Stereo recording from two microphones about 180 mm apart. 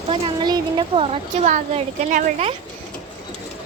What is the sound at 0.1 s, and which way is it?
Speech, 25° right (ahead or behind).